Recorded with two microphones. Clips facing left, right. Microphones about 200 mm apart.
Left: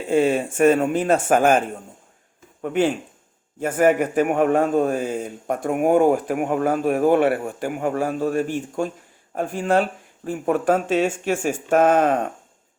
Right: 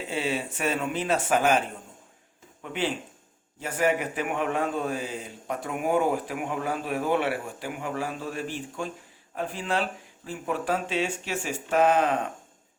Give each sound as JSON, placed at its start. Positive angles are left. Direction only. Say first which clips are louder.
{"t": 0.1, "sound": "a man's voice", "louder": "left 12 dB", "side_deg": 50}